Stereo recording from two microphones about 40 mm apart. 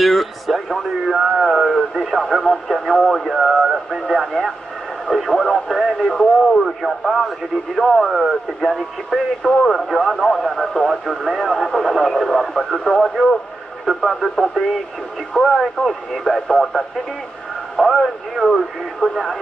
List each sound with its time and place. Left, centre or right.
0.0 s speech: centre
3.3 s radio: centre
6.1 s speech: centre
6.6 s speech: centre
10.9 s speech: centre
15.3 s speech: centre